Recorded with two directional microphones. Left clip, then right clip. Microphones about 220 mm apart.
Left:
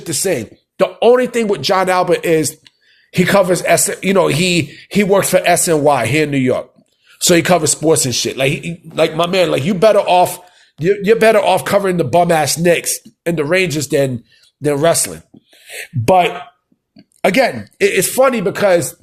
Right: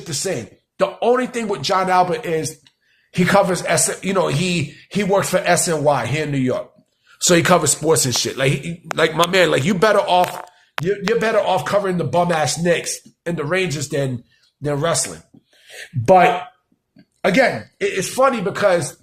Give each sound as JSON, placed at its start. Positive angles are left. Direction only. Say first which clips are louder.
{"t": 0.0, "sound": "speech", "louder": "left 6 dB", "side_deg": 30}
{"t": 10.0, "sound": "speech", "louder": "left 4 dB", "side_deg": 20}
{"t": 10.8, "sound": "speech", "louder": "left 8 dB", "side_deg": 35}